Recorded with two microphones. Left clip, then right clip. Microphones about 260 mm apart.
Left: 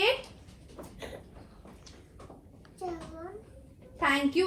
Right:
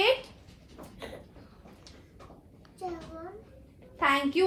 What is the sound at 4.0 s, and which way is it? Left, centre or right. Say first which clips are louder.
Speech: right 1 dB; right.